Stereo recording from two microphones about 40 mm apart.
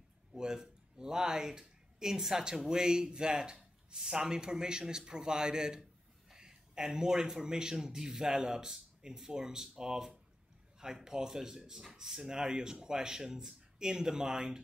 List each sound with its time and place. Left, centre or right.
0.4 s a man's voice: centre